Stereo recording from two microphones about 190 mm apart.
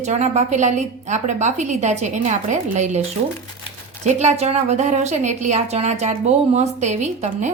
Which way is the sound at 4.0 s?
35° right (ahead or behind).